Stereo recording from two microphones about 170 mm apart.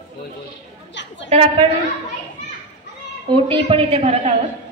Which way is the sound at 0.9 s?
90° left.